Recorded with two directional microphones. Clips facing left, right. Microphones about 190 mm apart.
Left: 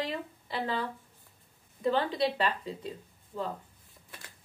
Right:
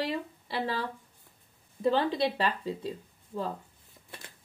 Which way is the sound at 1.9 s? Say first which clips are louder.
Right 1 dB; 25° right (ahead or behind).